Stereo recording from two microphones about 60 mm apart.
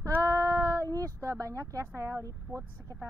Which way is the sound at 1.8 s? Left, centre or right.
Right.